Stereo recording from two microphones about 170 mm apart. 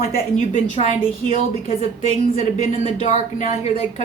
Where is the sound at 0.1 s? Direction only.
50° left (ahead or behind).